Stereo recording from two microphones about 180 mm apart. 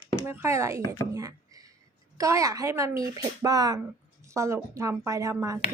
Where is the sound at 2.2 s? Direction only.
15° right (ahead or behind).